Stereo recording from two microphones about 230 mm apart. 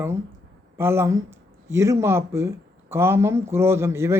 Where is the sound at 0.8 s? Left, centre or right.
Centre.